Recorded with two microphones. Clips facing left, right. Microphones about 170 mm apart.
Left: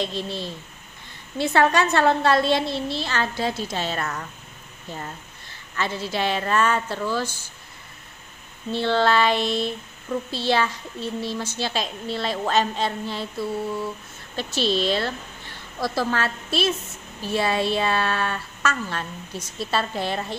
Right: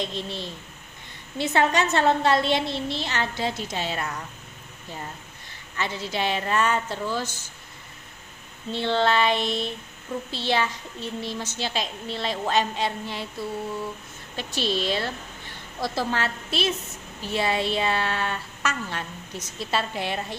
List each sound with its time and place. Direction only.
0.0 s a woman's voice: 15° right (ahead or behind)
5.8 s a woman's voice: 15° right (ahead or behind)
8.7 s a woman's voice: 20° right (ahead or behind)
14.3 s a woman's voice: 15° right (ahead or behind)